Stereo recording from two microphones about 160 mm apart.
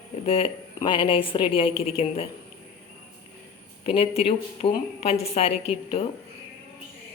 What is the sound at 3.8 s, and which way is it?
A woman's voice, 40° left (ahead or behind).